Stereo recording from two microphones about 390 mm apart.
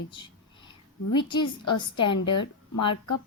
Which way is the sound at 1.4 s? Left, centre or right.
Left.